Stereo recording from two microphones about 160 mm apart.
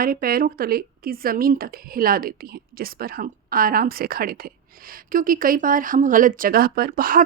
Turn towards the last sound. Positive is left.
turn(degrees=-60)  # may be behind; listen again after turning